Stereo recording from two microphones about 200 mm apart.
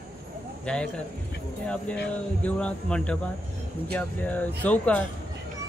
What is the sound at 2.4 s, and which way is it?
A man's voice, 5° left (ahead or behind).